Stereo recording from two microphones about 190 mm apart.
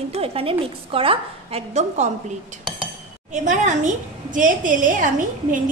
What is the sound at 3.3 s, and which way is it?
A woman's voice, 40° right (ahead or behind).